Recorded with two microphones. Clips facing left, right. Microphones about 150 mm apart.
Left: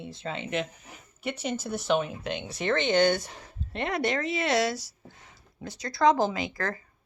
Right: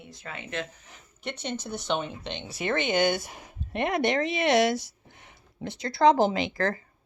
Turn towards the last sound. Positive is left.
turn(degrees=-25)  # may be behind; listen again after turning